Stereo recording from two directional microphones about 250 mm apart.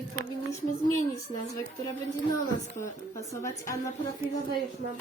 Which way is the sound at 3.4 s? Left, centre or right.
Centre.